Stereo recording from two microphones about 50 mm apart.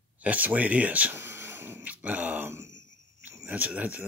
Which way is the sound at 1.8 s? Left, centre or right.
Right.